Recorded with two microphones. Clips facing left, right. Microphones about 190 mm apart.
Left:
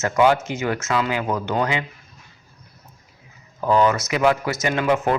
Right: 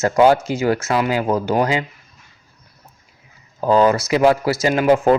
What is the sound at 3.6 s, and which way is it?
Speech, 30° right (ahead or behind).